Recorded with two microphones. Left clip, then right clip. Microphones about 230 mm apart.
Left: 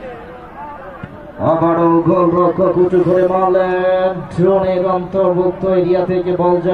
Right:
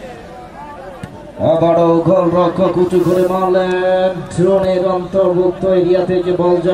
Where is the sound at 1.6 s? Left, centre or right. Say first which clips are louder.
Right 2 dB; right.